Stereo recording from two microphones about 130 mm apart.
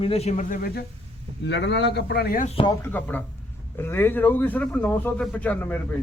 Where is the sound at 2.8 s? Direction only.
15° left (ahead or behind).